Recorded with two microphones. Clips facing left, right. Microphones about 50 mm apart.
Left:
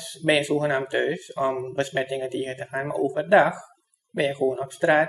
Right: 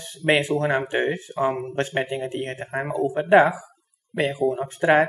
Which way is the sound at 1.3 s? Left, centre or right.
Centre.